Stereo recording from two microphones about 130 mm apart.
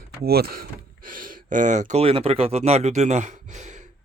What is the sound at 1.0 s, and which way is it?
Speech, 90° right.